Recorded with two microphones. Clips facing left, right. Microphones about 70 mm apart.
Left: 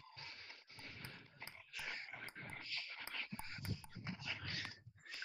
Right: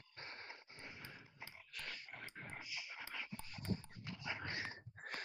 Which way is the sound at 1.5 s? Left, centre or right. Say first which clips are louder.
Left 2 dB; centre.